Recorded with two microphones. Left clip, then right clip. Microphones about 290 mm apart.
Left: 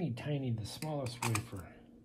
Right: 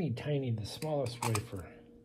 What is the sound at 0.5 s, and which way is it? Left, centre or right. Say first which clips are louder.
Speech: right 5 dB; centre.